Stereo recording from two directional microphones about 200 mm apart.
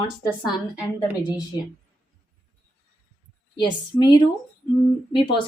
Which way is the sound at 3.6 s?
20° left (ahead or behind).